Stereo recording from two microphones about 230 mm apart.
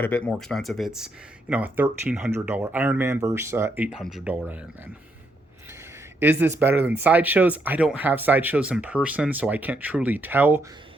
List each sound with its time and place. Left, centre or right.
0.0 s speech: centre
6.1 s speech: centre